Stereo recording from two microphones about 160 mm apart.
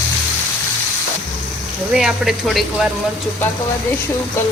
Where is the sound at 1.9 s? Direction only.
5° right (ahead or behind).